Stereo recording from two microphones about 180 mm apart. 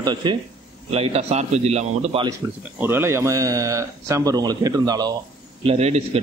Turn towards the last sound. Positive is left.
turn(degrees=-35)  # may be behind; listen again after turning